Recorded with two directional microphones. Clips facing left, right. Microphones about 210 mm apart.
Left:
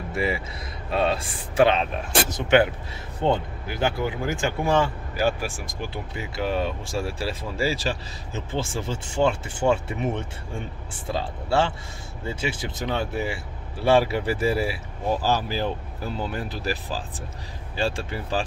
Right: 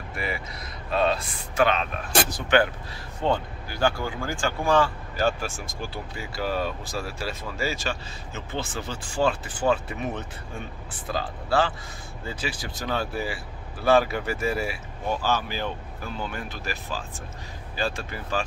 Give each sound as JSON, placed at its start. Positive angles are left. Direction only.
{"t": 0.1, "sound": "speech", "side_deg": 25}
{"t": 5.1, "sound": "speech", "side_deg": 10}